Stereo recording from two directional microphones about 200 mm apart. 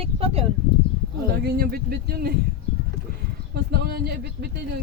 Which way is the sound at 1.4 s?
50° right (ahead or behind).